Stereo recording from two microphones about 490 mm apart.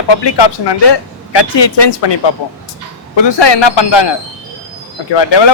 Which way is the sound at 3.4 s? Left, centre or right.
Left.